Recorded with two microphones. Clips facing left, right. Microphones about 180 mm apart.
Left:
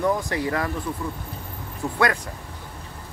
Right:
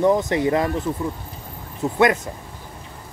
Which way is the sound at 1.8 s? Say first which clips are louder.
Right 5 dB; 20° right (ahead or behind).